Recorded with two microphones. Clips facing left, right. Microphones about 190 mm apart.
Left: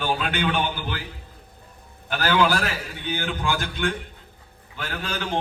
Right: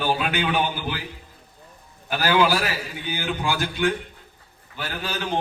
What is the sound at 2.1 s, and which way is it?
A man's voice, 10° right (ahead or behind).